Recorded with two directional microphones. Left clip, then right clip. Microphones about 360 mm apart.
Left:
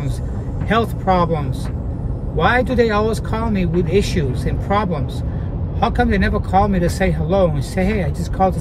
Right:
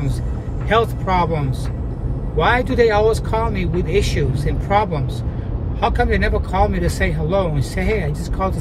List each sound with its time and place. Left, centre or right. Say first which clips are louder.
0.7 s speech: even; centre